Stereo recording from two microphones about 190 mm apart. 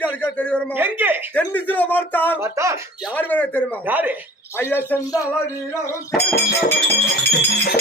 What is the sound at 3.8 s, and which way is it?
Speech, 10° right (ahead or behind).